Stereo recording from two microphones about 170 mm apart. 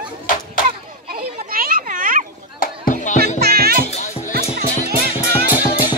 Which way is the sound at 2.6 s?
50° left (ahead or behind).